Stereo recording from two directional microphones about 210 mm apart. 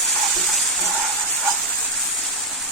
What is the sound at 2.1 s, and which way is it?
Vehicle, centre (ahead or behind).